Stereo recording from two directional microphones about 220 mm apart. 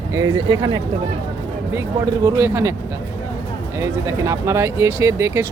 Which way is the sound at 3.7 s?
15° right (ahead or behind).